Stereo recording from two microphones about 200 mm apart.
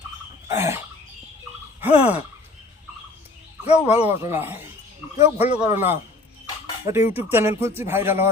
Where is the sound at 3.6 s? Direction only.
30° left (ahead or behind).